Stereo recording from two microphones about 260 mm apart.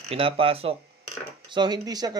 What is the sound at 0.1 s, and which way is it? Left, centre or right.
Speech, right.